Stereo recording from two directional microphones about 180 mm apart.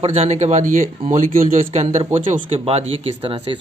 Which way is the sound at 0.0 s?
35° right (ahead or behind).